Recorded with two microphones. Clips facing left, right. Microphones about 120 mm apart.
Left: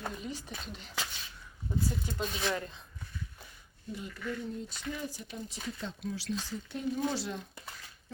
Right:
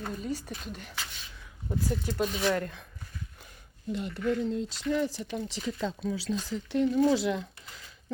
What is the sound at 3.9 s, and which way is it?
Speech, 75° right (ahead or behind).